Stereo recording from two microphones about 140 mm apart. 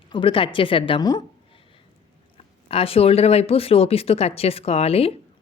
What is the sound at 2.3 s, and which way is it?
Speech, 45° left (ahead or behind).